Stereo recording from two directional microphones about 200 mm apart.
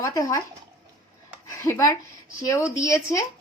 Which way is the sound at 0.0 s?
15° left (ahead or behind).